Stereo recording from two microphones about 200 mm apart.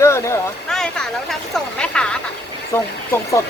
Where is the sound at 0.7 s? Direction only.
Centre (ahead or behind).